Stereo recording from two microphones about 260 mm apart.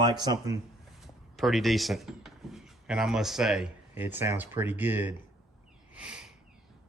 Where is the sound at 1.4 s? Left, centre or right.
Centre.